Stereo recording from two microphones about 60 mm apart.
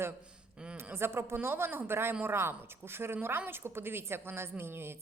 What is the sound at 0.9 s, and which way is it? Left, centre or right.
A woman's voice, right.